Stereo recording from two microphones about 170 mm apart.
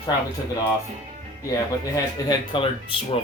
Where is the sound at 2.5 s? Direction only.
30° left (ahead or behind).